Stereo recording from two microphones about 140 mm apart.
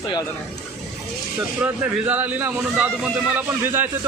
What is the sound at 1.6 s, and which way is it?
Speech, 15° right (ahead or behind).